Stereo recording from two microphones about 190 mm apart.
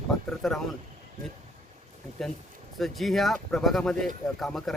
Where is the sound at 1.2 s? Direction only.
45° right (ahead or behind).